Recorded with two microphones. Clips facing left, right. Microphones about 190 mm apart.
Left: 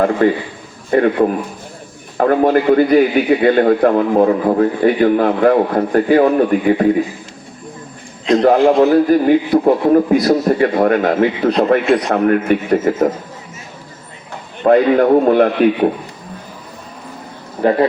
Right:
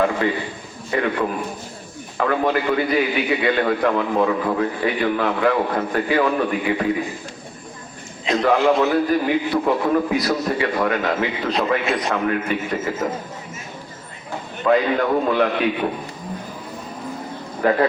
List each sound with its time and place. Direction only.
0.2 s a man's voice: 50° left (ahead or behind)
8.4 s a man's voice: 35° left (ahead or behind)
14.7 s a man's voice: 40° left (ahead or behind)
17.6 s speech: 25° left (ahead or behind)